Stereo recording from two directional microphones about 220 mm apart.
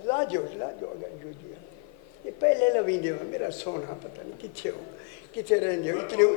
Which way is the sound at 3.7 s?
25° left (ahead or behind).